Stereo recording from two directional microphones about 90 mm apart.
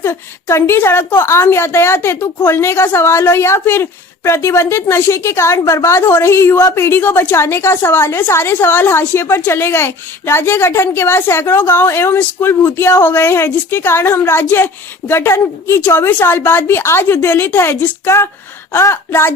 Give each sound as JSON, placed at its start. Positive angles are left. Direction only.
{"t": 0.0, "sound": "a woman's voice", "side_deg": 30}